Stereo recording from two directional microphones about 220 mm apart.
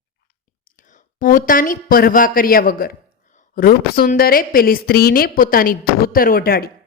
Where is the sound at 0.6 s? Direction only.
35° left (ahead or behind).